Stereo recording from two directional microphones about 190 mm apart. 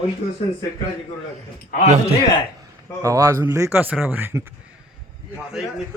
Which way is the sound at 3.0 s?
15° right (ahead or behind).